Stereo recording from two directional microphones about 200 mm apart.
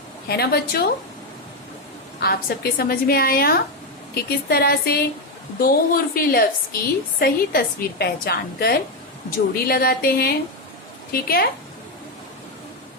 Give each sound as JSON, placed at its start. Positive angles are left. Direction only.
{"t": 0.3, "sound": "a woman's voice", "side_deg": 50}
{"t": 2.2, "sound": "a woman's voice", "side_deg": 50}